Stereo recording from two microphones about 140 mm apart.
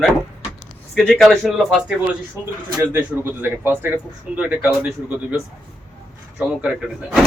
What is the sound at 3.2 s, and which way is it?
Speech, 15° right (ahead or behind).